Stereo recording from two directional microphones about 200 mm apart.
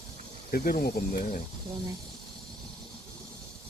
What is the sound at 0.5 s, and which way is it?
Speech, 50° left (ahead or behind).